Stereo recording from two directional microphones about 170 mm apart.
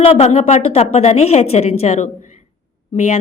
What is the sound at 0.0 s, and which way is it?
Speech, 35° left (ahead or behind).